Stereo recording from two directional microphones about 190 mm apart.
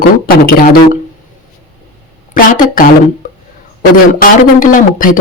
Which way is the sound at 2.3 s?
45° left (ahead or behind).